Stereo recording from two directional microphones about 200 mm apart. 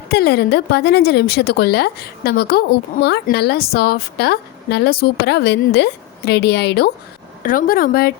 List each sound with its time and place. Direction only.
0.1 s speech: 55° left (ahead or behind)
7.4 s speech: 45° left (ahead or behind)